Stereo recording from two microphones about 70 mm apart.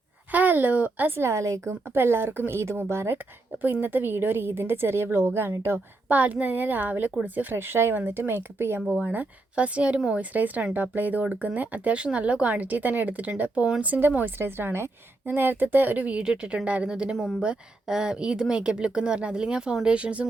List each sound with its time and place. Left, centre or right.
0.3 s speech: right
3.6 s speech: right
8.8 s speech: centre
9.0 s speech: centre